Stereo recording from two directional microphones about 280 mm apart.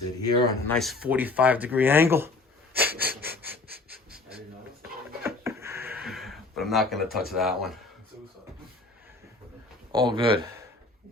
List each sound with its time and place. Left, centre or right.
0.2 s speech: centre
0.8 s speech: centre
2.9 s wheeze: right
3.2 s breathing: centre
5.2 s a sound: centre
9.9 s speech: centre